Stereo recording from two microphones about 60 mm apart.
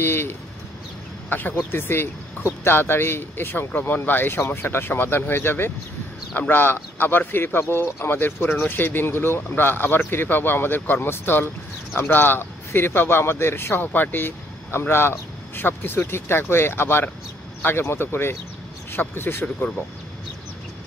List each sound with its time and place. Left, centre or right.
0.0 s speech: left